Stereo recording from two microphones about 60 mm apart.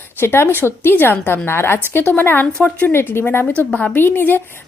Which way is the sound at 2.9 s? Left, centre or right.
Left.